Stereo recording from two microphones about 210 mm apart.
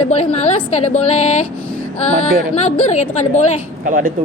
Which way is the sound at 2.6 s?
30° left (ahead or behind).